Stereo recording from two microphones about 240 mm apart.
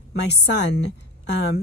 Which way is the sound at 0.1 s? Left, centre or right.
Left.